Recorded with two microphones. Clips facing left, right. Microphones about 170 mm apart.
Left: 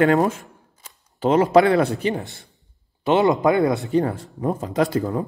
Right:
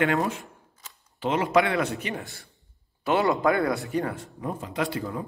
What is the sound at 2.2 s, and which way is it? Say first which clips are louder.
Speech: left 6 dB; 20° left (ahead or behind).